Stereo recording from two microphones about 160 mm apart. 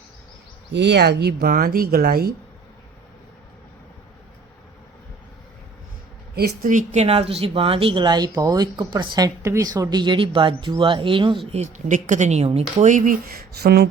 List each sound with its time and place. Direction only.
0.7 s speech: 90° right; by 2.3 s 70° right (ahead or behind)
6.3 s speech: 70° right (ahead or behind); by 11.6 s 30° right (ahead or behind)
11.6 s speech: 50° right (ahead or behind)
13.6 s a sound: 80° right